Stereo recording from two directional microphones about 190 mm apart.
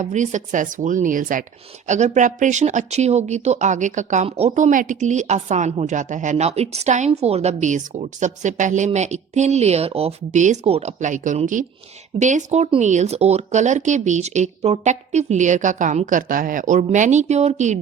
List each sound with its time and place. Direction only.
0.0 s speech: 40° right (ahead or behind)